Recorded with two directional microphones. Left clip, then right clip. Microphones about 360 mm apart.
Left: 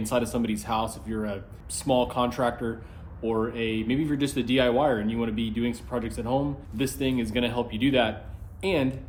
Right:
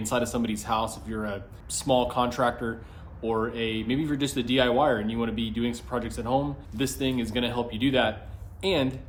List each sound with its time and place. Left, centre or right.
0.0 s speech: centre